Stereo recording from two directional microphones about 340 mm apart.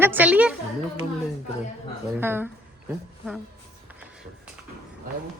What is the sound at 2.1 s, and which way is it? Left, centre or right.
Speech, centre.